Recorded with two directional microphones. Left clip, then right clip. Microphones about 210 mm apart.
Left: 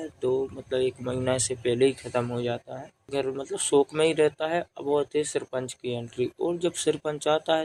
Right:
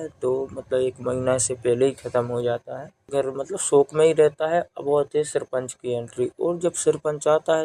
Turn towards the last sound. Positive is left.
turn(degrees=-10)  # may be behind; listen again after turning